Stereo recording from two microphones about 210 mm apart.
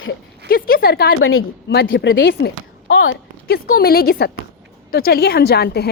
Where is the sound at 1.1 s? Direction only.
75° left (ahead or behind).